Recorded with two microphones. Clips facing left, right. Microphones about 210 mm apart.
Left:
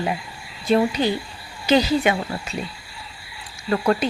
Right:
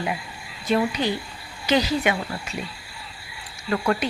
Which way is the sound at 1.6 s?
30° left (ahead or behind).